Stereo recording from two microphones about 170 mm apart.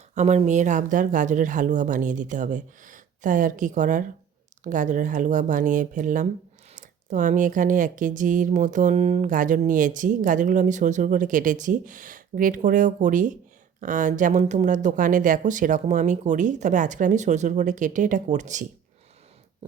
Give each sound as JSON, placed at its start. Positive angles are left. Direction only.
{"t": 0.1, "sound": "speech", "side_deg": -40}